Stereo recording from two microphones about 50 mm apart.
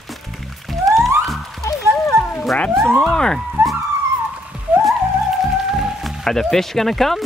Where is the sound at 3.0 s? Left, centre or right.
Centre.